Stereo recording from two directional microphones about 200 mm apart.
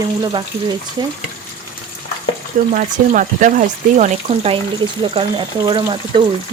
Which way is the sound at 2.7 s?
40° right (ahead or behind).